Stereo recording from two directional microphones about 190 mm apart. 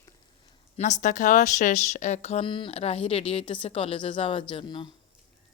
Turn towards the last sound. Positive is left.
turn(degrees=25)  # may be behind; listen again after turning